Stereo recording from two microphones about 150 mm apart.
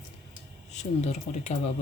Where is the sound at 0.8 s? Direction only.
50° left (ahead or behind).